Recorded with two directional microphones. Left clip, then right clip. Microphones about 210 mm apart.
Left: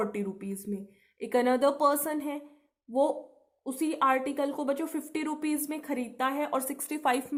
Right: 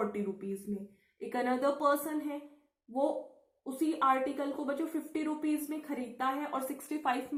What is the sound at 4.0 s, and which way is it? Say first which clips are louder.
A woman's voice: left 4 dB; 50° left (ahead or behind).